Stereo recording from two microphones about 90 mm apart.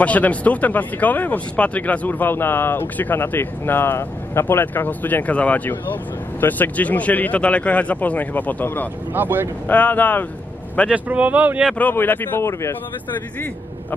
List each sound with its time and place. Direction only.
0.0 s speech: 15° left (ahead or behind)
9.1 s speech: 20° right (ahead or behind)
9.7 s speech: 20° left (ahead or behind)
10.9 s speech: 15° right (ahead or behind)
11.8 s speech: 20° left (ahead or behind)